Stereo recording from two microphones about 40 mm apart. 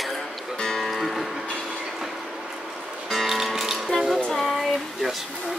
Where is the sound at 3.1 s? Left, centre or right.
Centre.